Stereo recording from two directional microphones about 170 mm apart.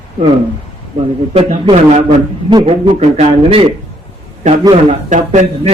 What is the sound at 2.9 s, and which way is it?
Speech, 40° right (ahead or behind).